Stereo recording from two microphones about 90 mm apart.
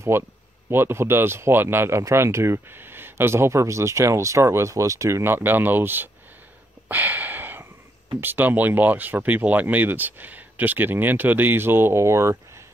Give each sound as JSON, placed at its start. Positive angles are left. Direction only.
{"t": 0.1, "sound": "speech", "side_deg": -25}
{"t": 6.9, "sound": "a sound", "side_deg": -20}
{"t": 8.2, "sound": "speech", "side_deg": -20}